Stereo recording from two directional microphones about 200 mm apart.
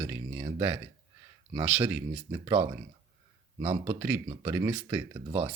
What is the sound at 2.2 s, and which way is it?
Speech, 20° right (ahead or behind).